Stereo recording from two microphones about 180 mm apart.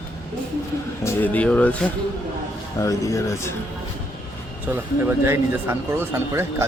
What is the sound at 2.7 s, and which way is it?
Speech, 15° left (ahead or behind).